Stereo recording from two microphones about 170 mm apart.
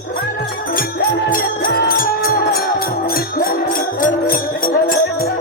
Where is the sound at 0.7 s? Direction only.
55° left (ahead or behind).